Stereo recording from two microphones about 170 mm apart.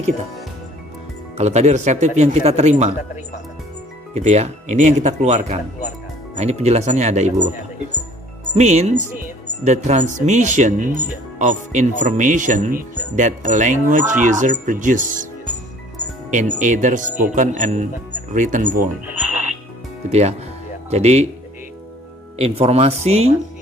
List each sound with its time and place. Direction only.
1.4 s speech: 40° right (ahead or behind)
4.1 s speech: 40° right (ahead or behind)
8.5 s speech: 40° right (ahead or behind)
16.3 s speech: 45° right (ahead or behind)
20.1 s speech: 40° right (ahead or behind)
22.4 s speech: 35° right (ahead or behind)